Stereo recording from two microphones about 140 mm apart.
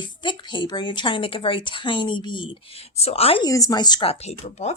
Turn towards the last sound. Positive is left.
turn(degrees=50)  # may be behind; listen again after turning